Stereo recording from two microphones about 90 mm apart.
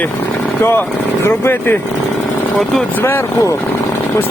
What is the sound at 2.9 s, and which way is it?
Speech, 25° left (ahead or behind).